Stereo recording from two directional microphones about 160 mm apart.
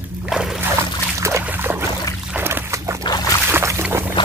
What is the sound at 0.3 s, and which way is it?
Dog, 5° right (ahead or behind).